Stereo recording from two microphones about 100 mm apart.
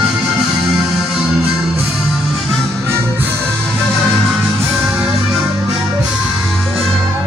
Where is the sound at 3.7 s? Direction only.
Centre (ahead or behind).